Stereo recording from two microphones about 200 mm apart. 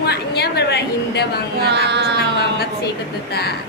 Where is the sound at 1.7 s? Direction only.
60° right (ahead or behind).